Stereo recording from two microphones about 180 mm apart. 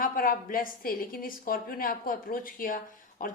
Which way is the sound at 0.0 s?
50° left (ahead or behind).